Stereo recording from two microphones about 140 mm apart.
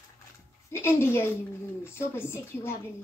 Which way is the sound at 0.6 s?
20° left (ahead or behind).